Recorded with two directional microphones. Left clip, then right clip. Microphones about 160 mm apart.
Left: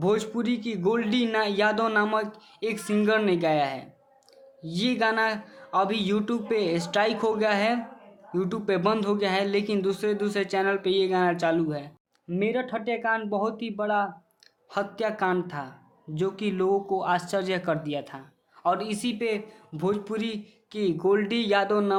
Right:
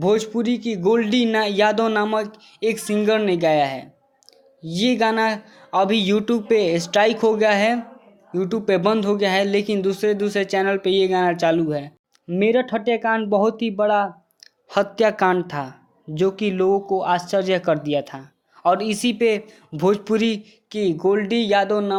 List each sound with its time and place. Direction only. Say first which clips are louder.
0.0 s speech: right 6 dB; 20° right (ahead or behind)
12.3 s speech: right 8 dB; 40° right (ahead or behind); by 21.9 s 20° right (ahead or behind)